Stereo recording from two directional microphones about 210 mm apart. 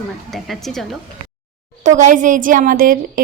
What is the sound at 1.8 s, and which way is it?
A child's voice, 35° right (ahead or behind).